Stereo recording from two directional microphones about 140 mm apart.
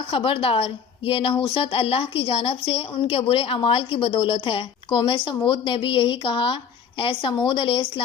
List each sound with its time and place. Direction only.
0.1 s a woman's voice: 40° left (ahead or behind)